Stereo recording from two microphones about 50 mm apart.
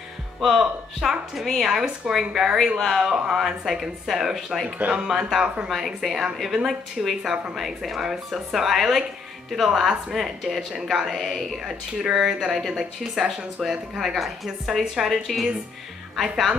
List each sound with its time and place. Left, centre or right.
0.4 s speech: centre
1.7 s a woman's voice: centre
4.6 s speech: right
5.0 s a woman's voice: centre